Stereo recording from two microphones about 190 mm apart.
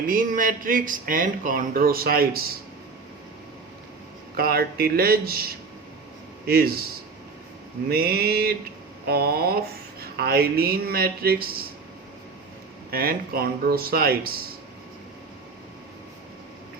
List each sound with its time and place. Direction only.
0.1 s speech: 45° right (ahead or behind)
4.4 s speech: 55° right (ahead or behind)
7.9 s speech: 55° right (ahead or behind)
12.9 s speech: 55° right (ahead or behind)